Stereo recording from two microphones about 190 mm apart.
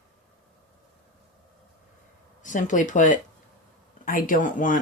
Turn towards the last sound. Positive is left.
turn(degrees=45)  # may be behind; listen again after turning